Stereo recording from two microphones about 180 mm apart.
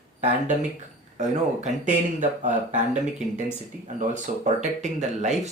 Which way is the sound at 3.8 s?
40° right (ahead or behind).